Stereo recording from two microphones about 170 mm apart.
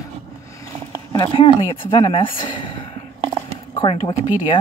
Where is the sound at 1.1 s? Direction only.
30° left (ahead or behind).